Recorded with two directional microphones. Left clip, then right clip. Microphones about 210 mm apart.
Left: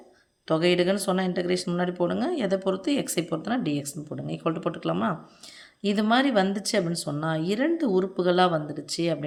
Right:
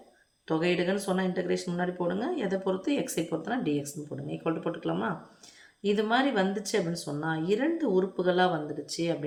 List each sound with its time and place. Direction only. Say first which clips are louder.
0.4 s speech: left 5 dB; 45° left (ahead or behind)